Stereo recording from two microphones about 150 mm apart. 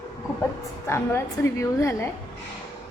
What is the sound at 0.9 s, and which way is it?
A woman's voice, 15° left (ahead or behind).